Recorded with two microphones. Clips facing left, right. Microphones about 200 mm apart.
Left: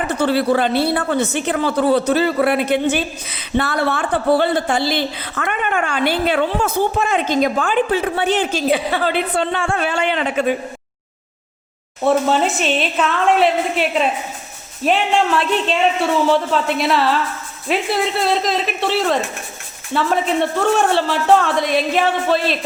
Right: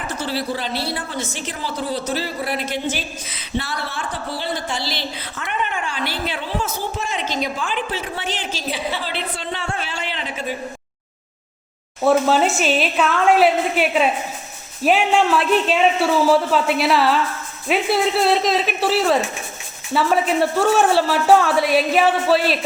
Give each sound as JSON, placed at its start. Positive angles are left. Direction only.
{"t": 0.1, "sound": "speech", "side_deg": 60}
{"t": 12.0, "sound": "speech", "side_deg": 0}